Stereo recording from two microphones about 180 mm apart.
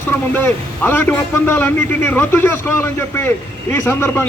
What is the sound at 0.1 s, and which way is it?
Speech, 10° left (ahead or behind).